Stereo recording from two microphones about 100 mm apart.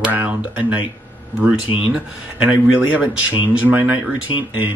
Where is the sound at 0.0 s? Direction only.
15° right (ahead or behind).